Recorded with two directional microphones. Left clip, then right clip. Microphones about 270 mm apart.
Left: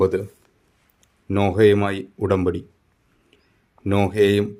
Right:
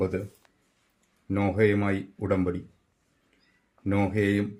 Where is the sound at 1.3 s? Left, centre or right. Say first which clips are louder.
Left 8 dB; left.